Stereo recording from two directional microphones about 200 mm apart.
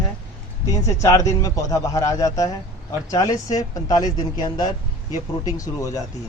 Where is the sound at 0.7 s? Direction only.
15° left (ahead or behind).